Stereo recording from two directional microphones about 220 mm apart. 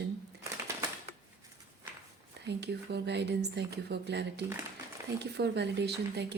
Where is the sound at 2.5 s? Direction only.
50° right (ahead or behind).